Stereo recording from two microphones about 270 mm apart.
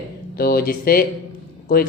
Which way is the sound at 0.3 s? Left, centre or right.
Left.